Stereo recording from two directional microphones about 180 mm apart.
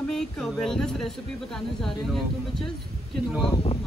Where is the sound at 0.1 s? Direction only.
5° left (ahead or behind).